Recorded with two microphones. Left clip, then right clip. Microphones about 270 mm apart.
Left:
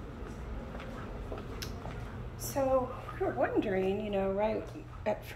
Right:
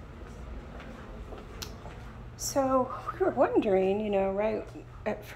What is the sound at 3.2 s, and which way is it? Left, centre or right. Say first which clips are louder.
Speech: right 5 dB; centre.